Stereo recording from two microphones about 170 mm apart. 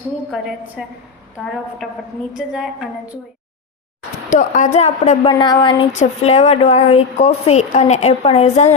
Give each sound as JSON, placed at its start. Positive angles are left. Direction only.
{"t": 0.3, "sound": "a woman's voice", "side_deg": 0}
{"t": 4.3, "sound": "a woman's voice", "side_deg": 50}
{"t": 5.3, "sound": "speech", "side_deg": 25}
{"t": 5.9, "sound": "a woman's voice", "side_deg": 40}